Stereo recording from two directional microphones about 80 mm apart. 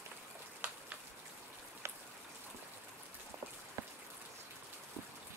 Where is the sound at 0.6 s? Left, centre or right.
Right.